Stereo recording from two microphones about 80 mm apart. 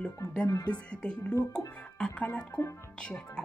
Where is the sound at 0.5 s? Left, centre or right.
Left.